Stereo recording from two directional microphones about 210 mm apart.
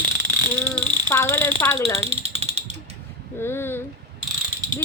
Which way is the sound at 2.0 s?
30° right (ahead or behind).